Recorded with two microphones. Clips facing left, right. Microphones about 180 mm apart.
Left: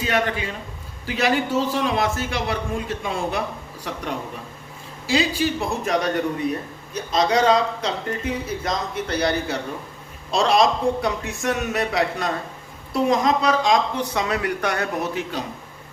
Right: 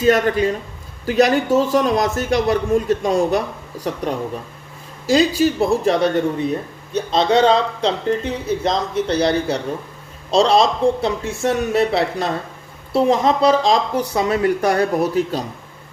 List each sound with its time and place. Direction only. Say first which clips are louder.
0.0 s speech: right 8 dB; 40° right (ahead or behind)
5.0 s speech: right 6 dB; 40° right (ahead or behind)